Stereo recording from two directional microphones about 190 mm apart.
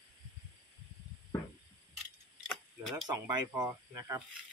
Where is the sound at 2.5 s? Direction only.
Centre (ahead or behind).